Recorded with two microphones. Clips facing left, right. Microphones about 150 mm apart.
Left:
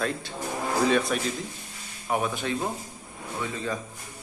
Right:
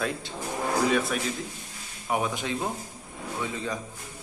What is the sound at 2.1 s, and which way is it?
A man's voice, 15° right (ahead or behind).